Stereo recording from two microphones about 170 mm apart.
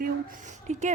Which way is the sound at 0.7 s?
40° right (ahead or behind).